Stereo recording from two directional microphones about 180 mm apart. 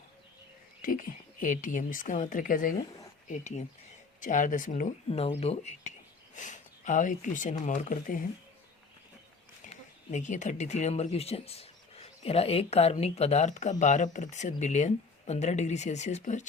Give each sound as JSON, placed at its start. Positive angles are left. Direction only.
{"t": 0.8, "sound": "speech", "side_deg": 50}
{"t": 9.6, "sound": "speech", "side_deg": 40}